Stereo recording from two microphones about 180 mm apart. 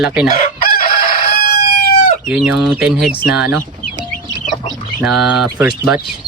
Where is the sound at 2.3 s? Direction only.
5° right (ahead or behind).